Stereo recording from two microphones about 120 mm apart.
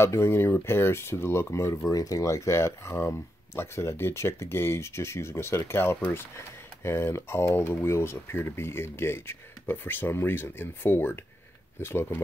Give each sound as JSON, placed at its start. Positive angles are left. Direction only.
{"t": 0.0, "sound": "speech", "side_deg": 20}